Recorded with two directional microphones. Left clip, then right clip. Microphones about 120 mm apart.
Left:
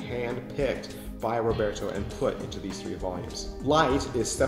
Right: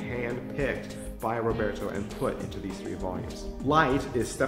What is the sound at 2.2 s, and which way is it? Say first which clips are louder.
Speech: left 3 dB; 30° right (ahead or behind).